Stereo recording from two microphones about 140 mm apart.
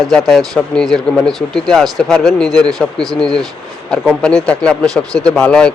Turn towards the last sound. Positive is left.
turn(degrees=5)  # may be behind; listen again after turning